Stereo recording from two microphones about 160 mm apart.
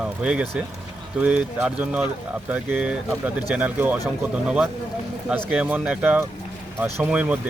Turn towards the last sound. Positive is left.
turn(degrees=-10)  # may be behind; listen again after turning